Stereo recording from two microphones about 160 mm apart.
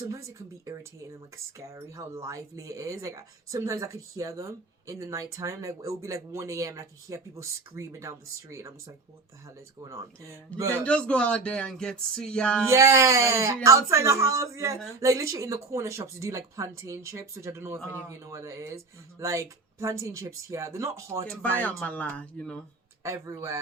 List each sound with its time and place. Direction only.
0.0 s speech: 20° right (ahead or behind)
10.8 s speech: 5° left (ahead or behind)
12.6 s speech: 20° right (ahead or behind)
21.6 s speech: 10° left (ahead or behind)
23.0 s speech: 15° right (ahead or behind)